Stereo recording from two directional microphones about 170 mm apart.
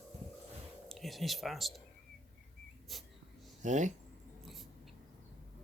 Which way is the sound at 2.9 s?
Centre (ahead or behind).